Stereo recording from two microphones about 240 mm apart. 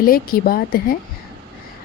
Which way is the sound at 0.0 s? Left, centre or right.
Left.